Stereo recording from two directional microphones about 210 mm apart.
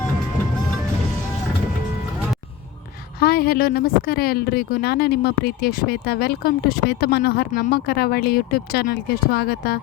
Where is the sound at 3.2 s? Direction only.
45° left (ahead or behind).